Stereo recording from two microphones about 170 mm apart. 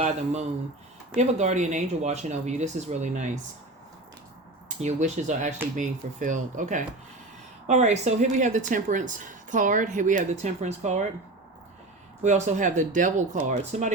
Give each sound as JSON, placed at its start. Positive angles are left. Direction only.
{"t": 0.0, "sound": "a woman's voice", "side_deg": -40}
{"t": 4.8, "sound": "a woman's voice", "side_deg": -45}
{"t": 12.2, "sound": "a woman's voice", "side_deg": -45}